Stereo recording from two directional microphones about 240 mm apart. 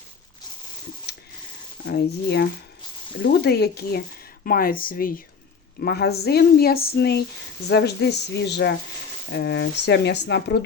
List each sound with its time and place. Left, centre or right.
1.9 s speech: left